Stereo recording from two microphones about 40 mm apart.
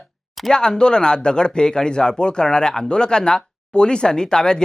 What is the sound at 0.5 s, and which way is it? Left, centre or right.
Speech, centre.